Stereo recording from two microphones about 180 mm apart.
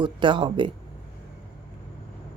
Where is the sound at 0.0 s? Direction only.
25° right (ahead or behind).